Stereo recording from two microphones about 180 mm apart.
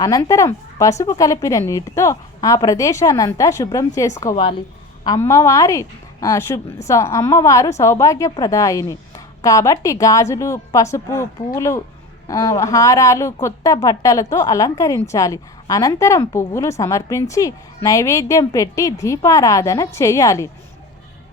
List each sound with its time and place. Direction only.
0.0 s a woman's voice: 20° left (ahead or behind)